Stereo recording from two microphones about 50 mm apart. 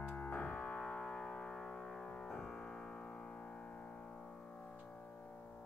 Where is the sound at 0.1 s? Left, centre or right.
Left; by 2.6 s centre.